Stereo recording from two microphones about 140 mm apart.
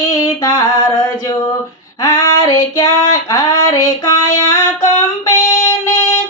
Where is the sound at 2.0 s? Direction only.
30° left (ahead or behind).